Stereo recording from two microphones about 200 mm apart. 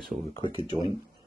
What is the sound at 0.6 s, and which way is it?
Speech, 25° right (ahead or behind).